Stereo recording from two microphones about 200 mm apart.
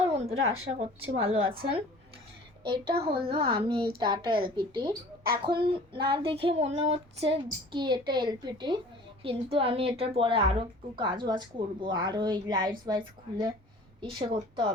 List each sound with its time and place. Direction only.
0.0 s a sound: 30° right (ahead or behind)
0.3 s speech: 90° right
0.6 s a woman's voice: 30° right (ahead or behind)
2.8 s a child's voice: 50° right (ahead or behind)
3.2 s a woman's voice: 25° right (ahead or behind)